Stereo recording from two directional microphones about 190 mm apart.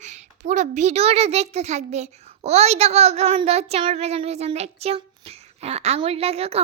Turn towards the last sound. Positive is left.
turn(degrees=-30)  # may be behind; listen again after turning